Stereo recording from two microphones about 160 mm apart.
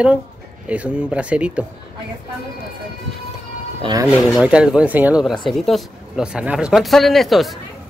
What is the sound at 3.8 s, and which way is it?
Speech, 25° right (ahead or behind).